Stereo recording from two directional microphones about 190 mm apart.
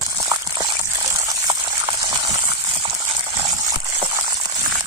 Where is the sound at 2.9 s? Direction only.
20° right (ahead or behind).